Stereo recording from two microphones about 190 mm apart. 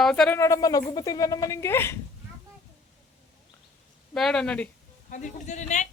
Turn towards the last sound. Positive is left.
turn(degrees=40)  # may be behind; listen again after turning